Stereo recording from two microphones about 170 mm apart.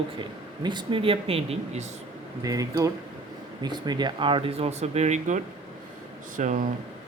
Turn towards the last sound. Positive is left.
turn(degrees=-50)  # may be behind; listen again after turning